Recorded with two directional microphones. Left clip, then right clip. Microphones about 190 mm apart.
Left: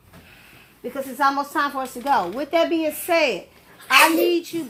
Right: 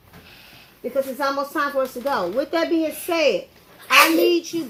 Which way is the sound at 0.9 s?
15° left (ahead or behind).